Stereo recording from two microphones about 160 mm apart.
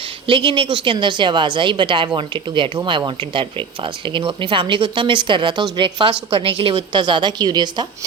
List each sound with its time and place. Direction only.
0.3 s speech: 30° right (ahead or behind)